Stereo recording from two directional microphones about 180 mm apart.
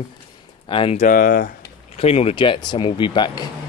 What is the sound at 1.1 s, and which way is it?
Speech, 55° left (ahead or behind).